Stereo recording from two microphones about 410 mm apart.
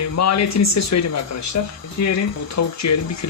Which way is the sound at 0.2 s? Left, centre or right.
Left.